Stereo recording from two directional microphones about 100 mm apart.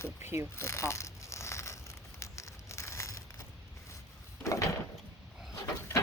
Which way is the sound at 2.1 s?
30° left (ahead or behind).